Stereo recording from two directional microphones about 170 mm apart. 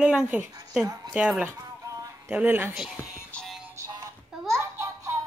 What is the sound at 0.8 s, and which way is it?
Speech, 20° right (ahead or behind).